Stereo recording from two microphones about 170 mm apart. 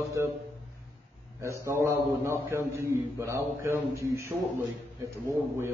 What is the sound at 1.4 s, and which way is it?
Speech, 15° right (ahead or behind).